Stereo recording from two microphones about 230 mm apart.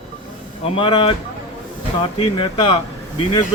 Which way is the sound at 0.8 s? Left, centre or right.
Left.